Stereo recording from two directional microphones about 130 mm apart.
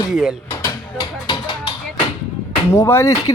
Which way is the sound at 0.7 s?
40° left (ahead or behind).